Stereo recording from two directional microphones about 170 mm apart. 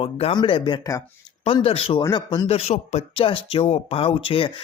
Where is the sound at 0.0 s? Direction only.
30° left (ahead or behind).